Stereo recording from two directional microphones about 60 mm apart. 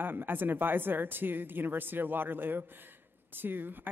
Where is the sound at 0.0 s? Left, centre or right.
Right.